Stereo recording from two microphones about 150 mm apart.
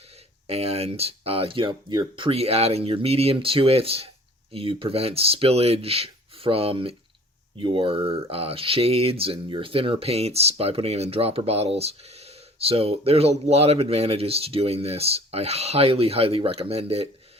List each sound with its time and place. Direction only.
0.4 s speech: 45° right (ahead or behind)